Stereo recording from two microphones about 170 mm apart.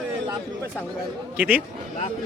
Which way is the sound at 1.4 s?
10° right (ahead or behind).